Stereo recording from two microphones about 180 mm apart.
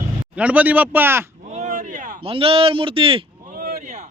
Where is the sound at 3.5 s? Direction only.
55° right (ahead or behind).